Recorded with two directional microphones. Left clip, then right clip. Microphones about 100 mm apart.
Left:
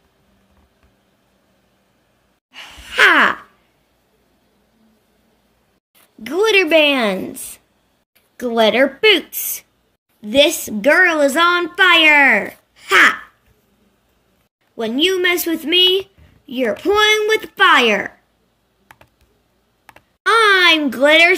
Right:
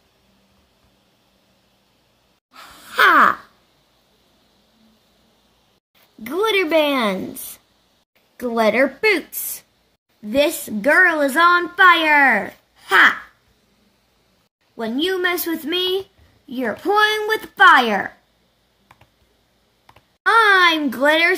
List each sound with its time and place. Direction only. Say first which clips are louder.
2.9 s crow: left 1 dB; 25° right (ahead or behind)
6.2 s a woman's voice: left 5 dB; 35° right (ahead or behind)
14.8 s a woman's voice: left 4 dB; 25° right (ahead or behind)
20.2 s a sound: left 2 dB; 20° right (ahead or behind)